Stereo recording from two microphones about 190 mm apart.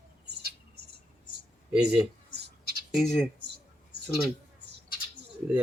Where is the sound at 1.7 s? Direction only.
5° right (ahead or behind).